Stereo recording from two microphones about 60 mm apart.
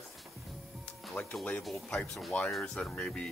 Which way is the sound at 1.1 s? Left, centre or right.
Left.